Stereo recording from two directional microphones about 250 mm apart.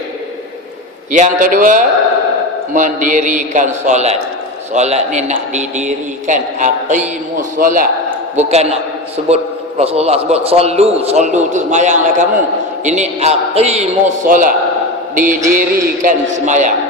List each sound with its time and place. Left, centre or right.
1.1 s a man's voice: right